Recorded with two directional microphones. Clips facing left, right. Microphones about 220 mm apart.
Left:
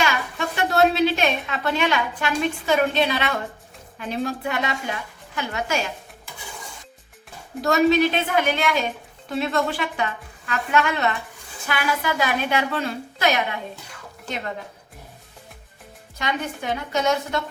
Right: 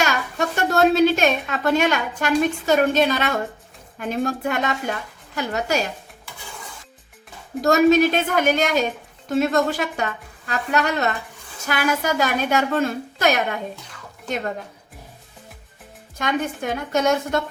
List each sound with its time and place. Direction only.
0.0 s a sound: 45° right (ahead or behind)
3.9 s a woman's voice: 45° right (ahead or behind)
7.6 s a woman's voice: 45° right (ahead or behind)
16.1 s a woman's voice: 50° right (ahead or behind)